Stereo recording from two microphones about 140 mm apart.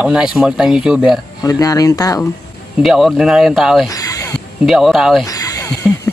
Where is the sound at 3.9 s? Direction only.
25° left (ahead or behind).